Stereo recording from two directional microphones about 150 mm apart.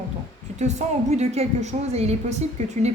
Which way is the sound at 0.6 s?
50° right (ahead or behind).